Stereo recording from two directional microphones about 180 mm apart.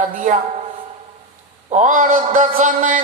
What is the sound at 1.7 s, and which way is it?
A man's voice, 45° right (ahead or behind).